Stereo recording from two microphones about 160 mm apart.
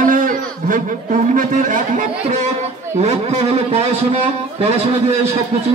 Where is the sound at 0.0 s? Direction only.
60° right (ahead or behind).